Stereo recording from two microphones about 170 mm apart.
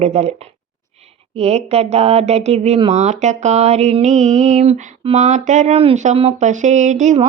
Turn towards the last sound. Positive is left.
turn(degrees=-45)  # may be behind; listen again after turning